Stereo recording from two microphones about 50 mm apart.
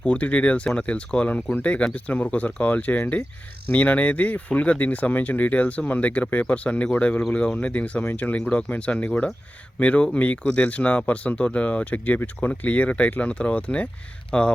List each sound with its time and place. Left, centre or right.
0.0 s speech: left
1.6 s speech: left